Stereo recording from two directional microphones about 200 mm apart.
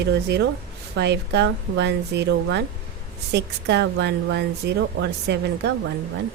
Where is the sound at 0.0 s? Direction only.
55° right (ahead or behind).